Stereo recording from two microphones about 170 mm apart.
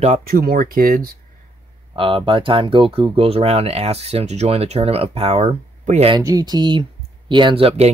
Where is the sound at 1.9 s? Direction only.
30° right (ahead or behind).